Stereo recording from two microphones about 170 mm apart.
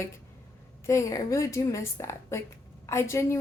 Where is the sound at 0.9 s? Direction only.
15° left (ahead or behind).